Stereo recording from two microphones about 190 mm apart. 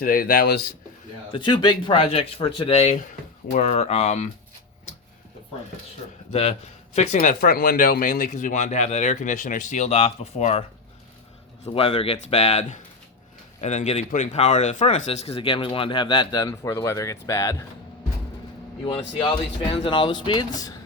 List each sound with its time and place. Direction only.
0.0 s speech: 50° left (ahead or behind)
1.3 s speech: 25° left (ahead or behind)
6.3 s speech: 35° left (ahead or behind); by 17.7 s 15° left (ahead or behind)
18.9 s speech: 25° left (ahead or behind)